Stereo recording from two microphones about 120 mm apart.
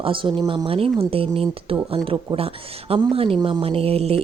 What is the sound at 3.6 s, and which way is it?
Speech, 55° right (ahead or behind).